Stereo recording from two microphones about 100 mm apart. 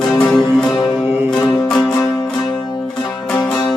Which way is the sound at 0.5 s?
Centre (ahead or behind).